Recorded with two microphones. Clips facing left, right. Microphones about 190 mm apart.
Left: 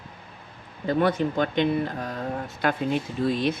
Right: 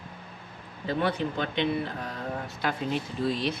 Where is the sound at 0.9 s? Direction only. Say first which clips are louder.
Left 5 dB; 45° left (ahead or behind).